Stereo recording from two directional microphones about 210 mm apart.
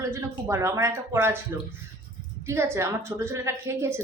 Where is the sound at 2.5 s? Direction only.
10° right (ahead or behind).